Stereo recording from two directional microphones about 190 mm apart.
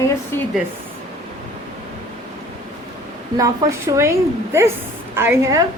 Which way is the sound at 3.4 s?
15° right (ahead or behind).